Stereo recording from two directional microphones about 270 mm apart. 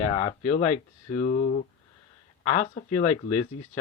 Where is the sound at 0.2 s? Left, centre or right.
Left.